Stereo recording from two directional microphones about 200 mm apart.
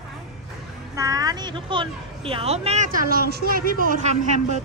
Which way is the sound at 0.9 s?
15° right (ahead or behind).